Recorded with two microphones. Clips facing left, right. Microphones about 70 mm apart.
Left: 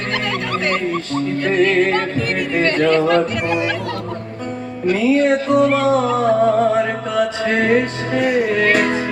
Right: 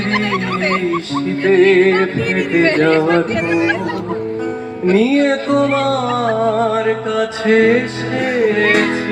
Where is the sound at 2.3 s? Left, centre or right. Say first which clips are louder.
Right 6 dB; centre.